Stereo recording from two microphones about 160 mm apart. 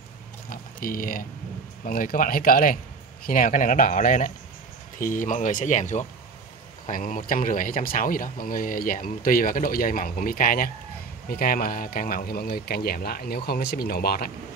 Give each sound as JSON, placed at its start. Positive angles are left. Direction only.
{"t": 0.5, "sound": "a sound", "side_deg": 60}
{"t": 1.9, "sound": "speech", "side_deg": 60}
{"t": 6.9, "sound": "speech", "side_deg": 60}